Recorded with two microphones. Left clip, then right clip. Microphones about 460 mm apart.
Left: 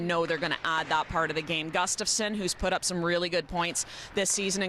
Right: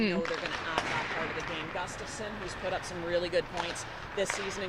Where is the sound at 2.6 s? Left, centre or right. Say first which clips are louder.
Left 6 dB; left.